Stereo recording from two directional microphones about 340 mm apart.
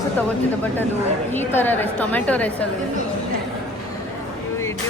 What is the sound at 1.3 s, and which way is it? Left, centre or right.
A woman's voice, centre.